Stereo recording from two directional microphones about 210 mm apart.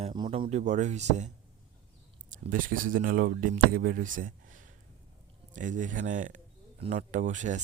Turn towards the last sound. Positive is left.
turn(degrees=-35)  # may be behind; listen again after turning